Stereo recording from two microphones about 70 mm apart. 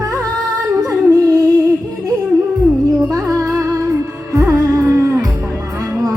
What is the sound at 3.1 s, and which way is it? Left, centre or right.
Music, right.